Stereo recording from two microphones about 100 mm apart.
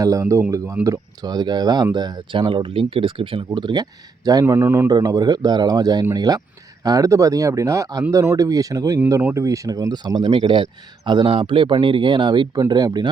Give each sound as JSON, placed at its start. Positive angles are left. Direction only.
{"t": 0.0, "sound": "a man's voice", "side_deg": -35}
{"t": 0.9, "sound": "speech", "side_deg": -40}
{"t": 4.4, "sound": "a man's voice", "side_deg": -25}
{"t": 4.9, "sound": "speech", "side_deg": -40}